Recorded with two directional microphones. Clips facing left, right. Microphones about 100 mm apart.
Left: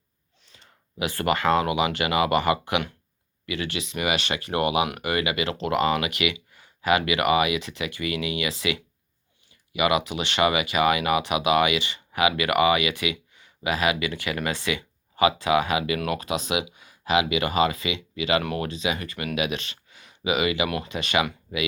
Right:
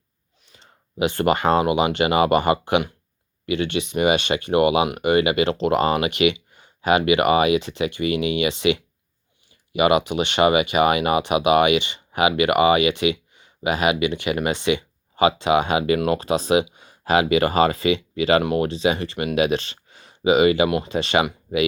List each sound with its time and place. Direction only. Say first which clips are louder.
0.5 s speech: right 6 dB; 25° right (ahead or behind)
18.4 s speech: right 7 dB; 25° right (ahead or behind)